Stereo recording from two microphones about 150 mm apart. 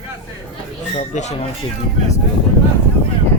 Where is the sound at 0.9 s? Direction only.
50° left (ahead or behind).